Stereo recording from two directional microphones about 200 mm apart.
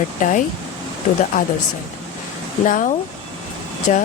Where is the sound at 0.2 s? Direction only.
40° left (ahead or behind).